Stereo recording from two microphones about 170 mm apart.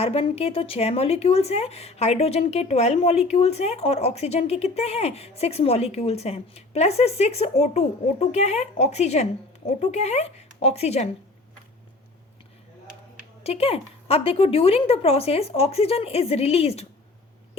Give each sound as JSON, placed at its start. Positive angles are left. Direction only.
{"t": 0.0, "sound": "speech", "side_deg": 35}
{"t": 13.4, "sound": "speech", "side_deg": 35}